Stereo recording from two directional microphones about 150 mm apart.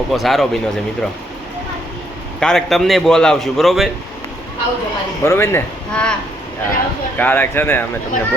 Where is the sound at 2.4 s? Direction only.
5° left (ahead or behind).